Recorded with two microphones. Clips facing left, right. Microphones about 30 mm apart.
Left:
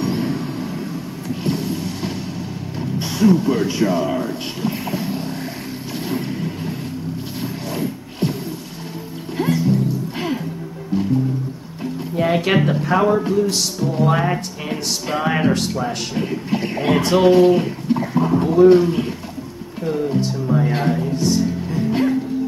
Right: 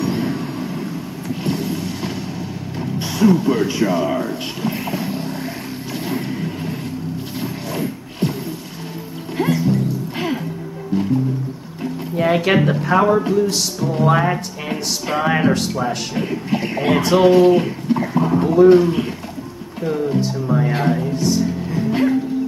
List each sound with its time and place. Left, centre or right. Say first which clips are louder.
0.0 s vehicle: even; centre
1.3 s a sound: even; centre
6.0 s vehicle: even; centre
7.4 s a sound: even; centre
9.4 s music: even; centre
11.8 s speech: right 1 dB; centre
20.4 s music: right 1 dB; centre